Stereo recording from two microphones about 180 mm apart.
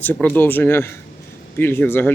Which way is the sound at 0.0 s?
10° left (ahead or behind).